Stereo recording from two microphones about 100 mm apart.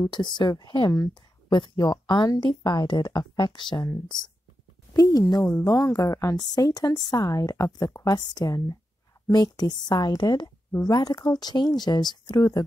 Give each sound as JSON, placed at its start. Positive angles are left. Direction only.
{"t": 0.1, "sound": "speech", "side_deg": 50}
{"t": 4.9, "sound": "a sound", "side_deg": 40}
{"t": 5.6, "sound": "a woman's voice", "side_deg": 35}